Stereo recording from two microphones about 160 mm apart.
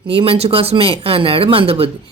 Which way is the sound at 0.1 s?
35° right (ahead or behind).